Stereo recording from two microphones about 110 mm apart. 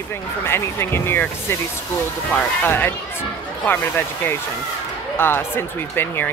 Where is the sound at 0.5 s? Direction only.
20° left (ahead or behind).